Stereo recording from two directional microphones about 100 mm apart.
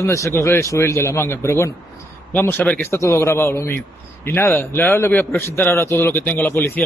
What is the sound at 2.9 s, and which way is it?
A man's voice, 25° left (ahead or behind).